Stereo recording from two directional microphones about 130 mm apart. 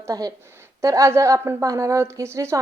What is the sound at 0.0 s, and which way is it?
A woman's voice, 30° right (ahead or behind).